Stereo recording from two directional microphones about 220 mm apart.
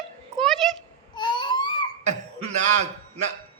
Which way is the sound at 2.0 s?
30° right (ahead or behind).